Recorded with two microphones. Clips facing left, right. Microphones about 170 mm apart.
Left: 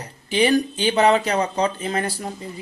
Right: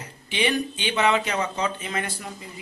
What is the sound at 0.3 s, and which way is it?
Speech, 40° left (ahead or behind).